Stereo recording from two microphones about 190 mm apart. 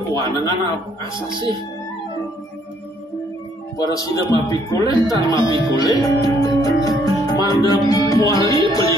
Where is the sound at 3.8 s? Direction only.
20° left (ahead or behind).